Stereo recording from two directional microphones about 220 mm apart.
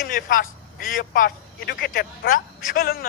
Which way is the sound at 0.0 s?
40° left (ahead or behind).